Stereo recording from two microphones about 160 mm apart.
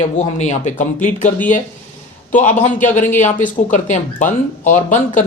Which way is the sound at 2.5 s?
50° left (ahead or behind).